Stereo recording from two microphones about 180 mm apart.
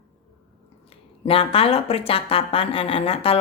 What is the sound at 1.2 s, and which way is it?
A woman's voice, 30° left (ahead or behind).